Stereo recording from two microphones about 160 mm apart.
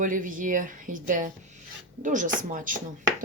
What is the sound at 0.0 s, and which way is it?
Speech, 55° right (ahead or behind).